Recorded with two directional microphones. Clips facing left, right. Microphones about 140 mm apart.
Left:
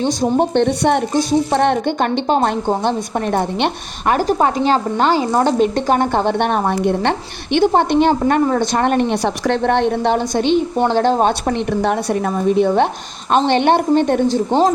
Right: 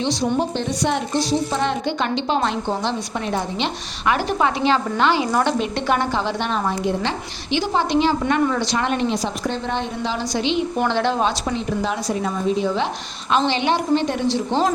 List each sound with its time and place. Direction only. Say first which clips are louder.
0.0 s a woman's voice: left 5 dB; 45° left (ahead or behind)
8.2 s a woman's voice: left 5 dB; 45° left (ahead or behind)
10.8 s a woman's voice: left 5 dB; 40° left (ahead or behind)